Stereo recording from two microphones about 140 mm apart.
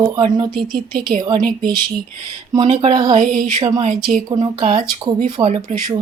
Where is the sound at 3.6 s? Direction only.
35° right (ahead or behind).